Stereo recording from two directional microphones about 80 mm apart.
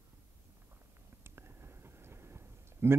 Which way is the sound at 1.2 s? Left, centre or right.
Right.